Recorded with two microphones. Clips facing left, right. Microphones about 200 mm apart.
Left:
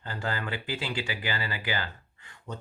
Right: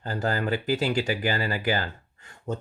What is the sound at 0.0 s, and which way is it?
Speech, 40° right (ahead or behind).